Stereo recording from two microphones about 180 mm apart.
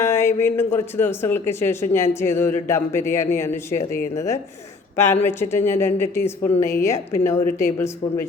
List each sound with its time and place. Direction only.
0.0 s speech: 15° left (ahead or behind)